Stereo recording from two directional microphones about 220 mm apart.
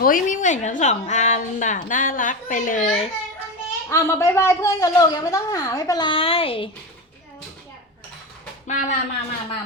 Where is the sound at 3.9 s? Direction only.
10° left (ahead or behind).